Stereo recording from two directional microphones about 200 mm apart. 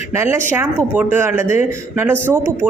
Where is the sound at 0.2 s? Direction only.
10° right (ahead or behind).